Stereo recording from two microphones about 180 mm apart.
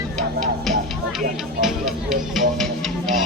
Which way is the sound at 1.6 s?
Centre (ahead or behind).